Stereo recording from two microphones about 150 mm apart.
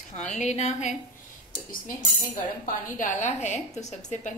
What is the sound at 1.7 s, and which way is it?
Speech, 65° left (ahead or behind).